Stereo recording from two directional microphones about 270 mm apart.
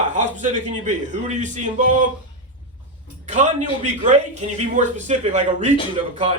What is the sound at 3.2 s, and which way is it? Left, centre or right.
A man's voice, right.